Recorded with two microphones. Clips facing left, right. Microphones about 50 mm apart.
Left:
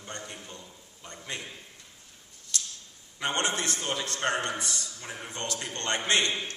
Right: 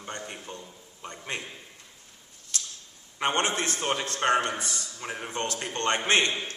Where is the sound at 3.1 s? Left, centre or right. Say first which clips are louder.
Right 3 dB; right.